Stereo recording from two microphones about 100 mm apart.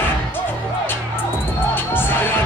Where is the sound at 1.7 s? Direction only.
20° left (ahead or behind).